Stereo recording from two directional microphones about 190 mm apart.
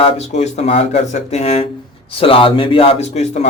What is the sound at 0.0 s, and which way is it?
A man's voice, 35° left (ahead or behind).